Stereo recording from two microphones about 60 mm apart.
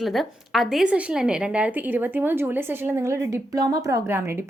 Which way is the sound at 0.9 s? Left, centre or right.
Right.